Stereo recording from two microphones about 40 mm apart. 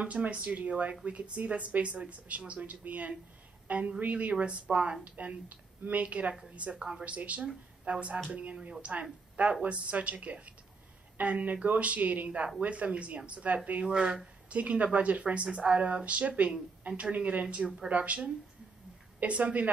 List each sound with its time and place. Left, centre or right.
0.0 s a woman's voice: right
5.0 s a woman's voice: right
6.8 s speech: right
7.2 s a woman's voice: right
13.8 s speech: right
14.5 s a woman's voice: right